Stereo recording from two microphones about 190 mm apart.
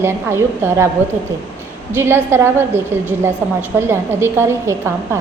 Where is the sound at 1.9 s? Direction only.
10° right (ahead or behind).